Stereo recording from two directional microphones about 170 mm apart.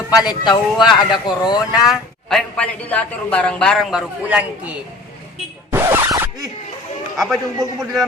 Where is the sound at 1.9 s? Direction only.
Centre (ahead or behind).